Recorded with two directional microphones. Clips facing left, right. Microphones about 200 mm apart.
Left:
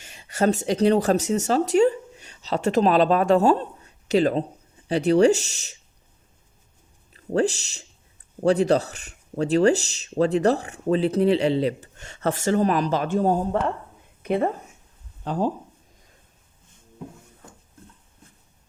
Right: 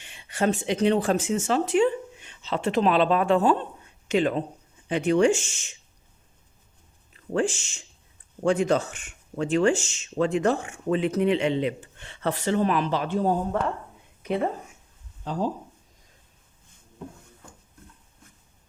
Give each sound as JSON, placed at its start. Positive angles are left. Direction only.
{"t": 0.0, "sound": "speech", "side_deg": 40}
{"t": 7.1, "sound": "speech", "side_deg": 40}